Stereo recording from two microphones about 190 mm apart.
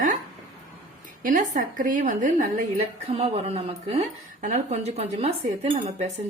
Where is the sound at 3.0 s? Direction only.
30° right (ahead or behind).